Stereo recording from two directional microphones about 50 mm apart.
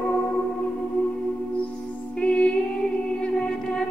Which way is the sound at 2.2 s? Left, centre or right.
Centre.